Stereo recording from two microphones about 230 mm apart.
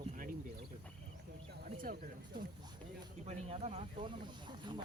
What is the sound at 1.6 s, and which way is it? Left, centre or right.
Speech, right.